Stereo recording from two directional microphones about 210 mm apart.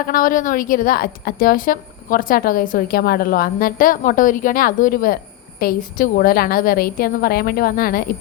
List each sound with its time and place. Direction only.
0.1 s a woman's voice: 40° left (ahead or behind)